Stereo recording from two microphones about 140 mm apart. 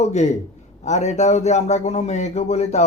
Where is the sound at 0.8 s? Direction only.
55° left (ahead or behind).